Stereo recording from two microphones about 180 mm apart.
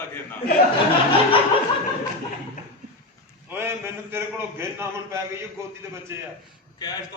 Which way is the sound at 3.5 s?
10° right (ahead or behind).